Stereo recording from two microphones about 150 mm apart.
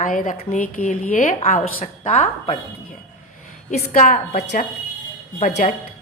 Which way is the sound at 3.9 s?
70° left (ahead or behind).